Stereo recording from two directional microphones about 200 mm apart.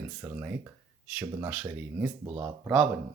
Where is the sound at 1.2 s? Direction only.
20° right (ahead or behind).